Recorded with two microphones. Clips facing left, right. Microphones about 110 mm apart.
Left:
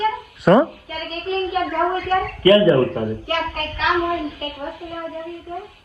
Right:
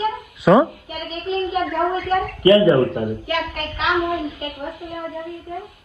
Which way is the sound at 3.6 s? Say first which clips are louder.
Left 1 dB; 25° right (ahead or behind).